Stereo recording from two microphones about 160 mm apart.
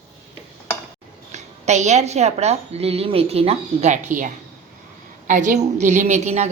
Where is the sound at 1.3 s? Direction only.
45° right (ahead or behind).